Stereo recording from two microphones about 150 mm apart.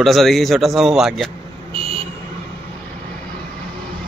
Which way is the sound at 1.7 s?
40° right (ahead or behind).